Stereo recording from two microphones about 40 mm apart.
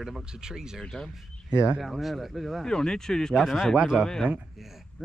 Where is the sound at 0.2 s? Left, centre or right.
Centre.